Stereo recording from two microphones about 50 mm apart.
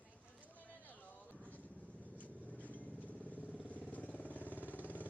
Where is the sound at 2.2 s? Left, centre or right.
Left.